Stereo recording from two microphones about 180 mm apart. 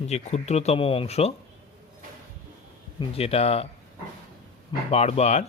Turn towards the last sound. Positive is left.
turn(degrees=35)  # may be behind; listen again after turning